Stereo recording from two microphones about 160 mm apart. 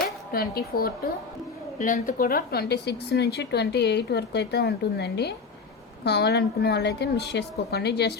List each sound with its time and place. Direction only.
0.3 s speech: 70° left (ahead or behind)
1.8 s a woman's voice: 60° left (ahead or behind); by 8.1 s 90° left